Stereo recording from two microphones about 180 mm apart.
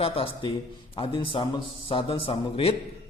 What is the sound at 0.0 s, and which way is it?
A man's voice, 30° left (ahead or behind).